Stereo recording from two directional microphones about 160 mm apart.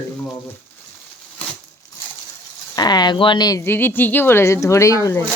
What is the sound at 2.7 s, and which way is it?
A woman's voice, 25° left (ahead or behind).